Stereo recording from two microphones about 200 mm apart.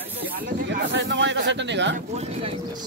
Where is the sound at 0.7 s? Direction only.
65° right (ahead or behind).